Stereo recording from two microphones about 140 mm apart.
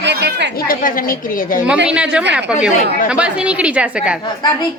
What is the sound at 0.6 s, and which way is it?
A woman's voice, 85° left.